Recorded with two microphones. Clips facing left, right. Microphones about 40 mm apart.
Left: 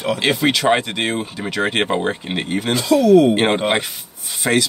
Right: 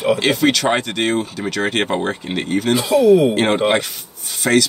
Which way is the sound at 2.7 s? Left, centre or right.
Centre.